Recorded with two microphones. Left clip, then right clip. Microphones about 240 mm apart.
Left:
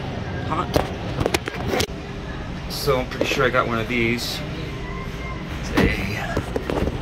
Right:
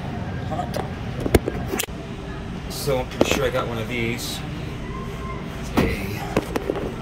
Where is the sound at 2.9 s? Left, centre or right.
Centre.